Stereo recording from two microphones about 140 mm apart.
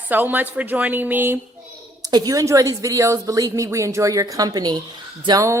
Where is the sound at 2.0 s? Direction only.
25° right (ahead or behind).